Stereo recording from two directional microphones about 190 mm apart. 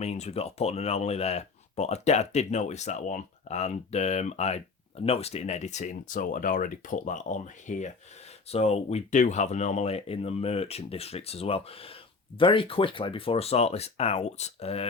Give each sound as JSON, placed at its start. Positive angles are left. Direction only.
{"t": 0.0, "sound": "speech", "side_deg": 35}